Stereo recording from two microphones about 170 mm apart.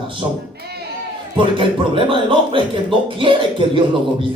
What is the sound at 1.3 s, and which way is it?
Speech, 30° right (ahead or behind).